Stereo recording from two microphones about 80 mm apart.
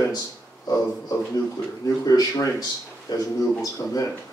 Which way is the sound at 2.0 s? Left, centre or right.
Left.